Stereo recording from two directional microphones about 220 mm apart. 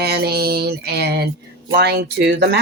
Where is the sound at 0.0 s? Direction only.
45° right (ahead or behind).